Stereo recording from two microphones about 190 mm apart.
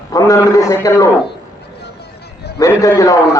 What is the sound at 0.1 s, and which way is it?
A man's voice, 15° left (ahead or behind).